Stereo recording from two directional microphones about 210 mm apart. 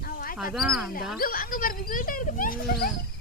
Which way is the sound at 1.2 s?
40° left (ahead or behind).